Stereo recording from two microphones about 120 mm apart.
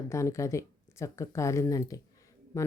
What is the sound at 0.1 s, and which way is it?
A woman's voice, 25° left (ahead or behind).